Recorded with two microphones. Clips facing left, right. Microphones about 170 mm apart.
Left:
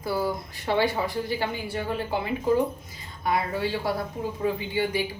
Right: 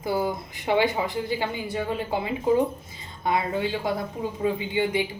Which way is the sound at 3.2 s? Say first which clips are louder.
Right 1 dB; 20° right (ahead or behind).